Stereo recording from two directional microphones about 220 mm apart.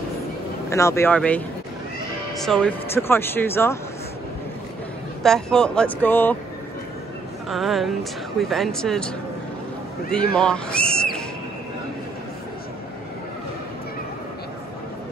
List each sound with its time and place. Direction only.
0.7 s speech: 15° left (ahead or behind)
2.4 s speech: 5° left (ahead or behind)
5.2 s speech: 5° left (ahead or behind)
7.4 s speech: centre (ahead or behind)
10.1 s speech: 5° left (ahead or behind)